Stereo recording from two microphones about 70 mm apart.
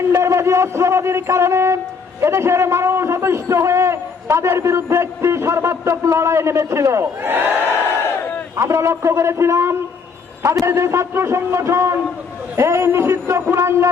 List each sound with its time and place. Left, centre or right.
0.1 s a man's voice: right
7.2 s crowd: right
8.5 s a man's voice: right